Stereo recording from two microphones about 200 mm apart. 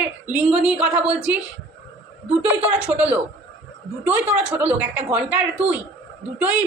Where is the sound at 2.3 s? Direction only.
5° right (ahead or behind).